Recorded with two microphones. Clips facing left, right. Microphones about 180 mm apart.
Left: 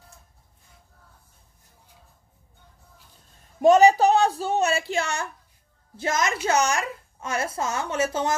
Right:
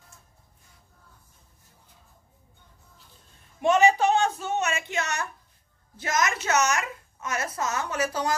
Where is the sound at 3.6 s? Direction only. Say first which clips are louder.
Left 5 dB; 40° left (ahead or behind).